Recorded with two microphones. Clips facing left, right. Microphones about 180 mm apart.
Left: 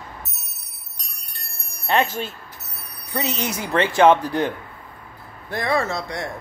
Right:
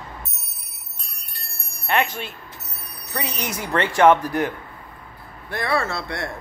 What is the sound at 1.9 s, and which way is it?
Speech, 40° left (ahead or behind).